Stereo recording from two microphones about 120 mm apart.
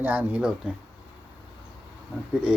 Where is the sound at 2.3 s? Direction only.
10° right (ahead or behind).